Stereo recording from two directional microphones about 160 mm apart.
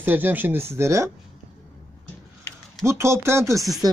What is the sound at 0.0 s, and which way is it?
Speech, 10° right (ahead or behind).